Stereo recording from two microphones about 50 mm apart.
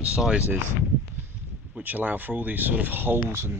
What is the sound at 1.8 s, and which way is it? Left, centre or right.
Speech, right.